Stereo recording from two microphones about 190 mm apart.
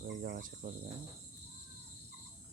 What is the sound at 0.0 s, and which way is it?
Cricket, 45° right (ahead or behind).